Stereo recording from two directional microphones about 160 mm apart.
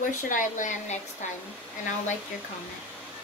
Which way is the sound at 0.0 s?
55° left (ahead or behind).